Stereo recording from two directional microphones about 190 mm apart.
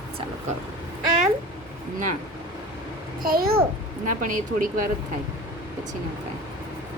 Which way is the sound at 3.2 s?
50° right (ahead or behind).